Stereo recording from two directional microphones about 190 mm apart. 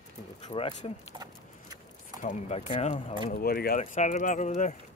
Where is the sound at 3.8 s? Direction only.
40° left (ahead or behind).